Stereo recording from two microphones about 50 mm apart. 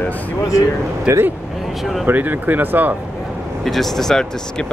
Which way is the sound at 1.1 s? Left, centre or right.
Right.